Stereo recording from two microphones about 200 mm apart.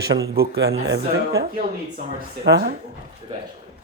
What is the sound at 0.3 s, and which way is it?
Speech, 55° right (ahead or behind).